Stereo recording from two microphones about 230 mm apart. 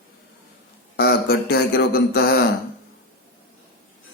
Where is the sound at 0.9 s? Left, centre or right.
Left.